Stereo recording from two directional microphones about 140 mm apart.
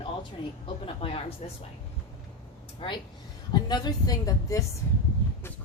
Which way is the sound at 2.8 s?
40° left (ahead or behind).